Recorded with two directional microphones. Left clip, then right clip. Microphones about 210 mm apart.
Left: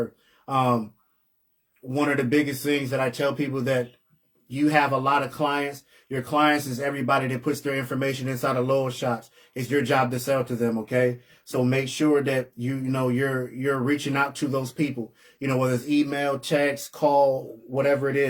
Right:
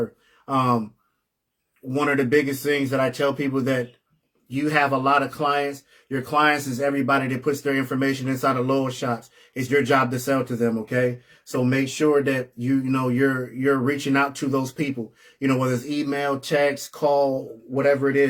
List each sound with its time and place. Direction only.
0.4 s speech: 15° right (ahead or behind)
1.9 s speech: 15° right (ahead or behind)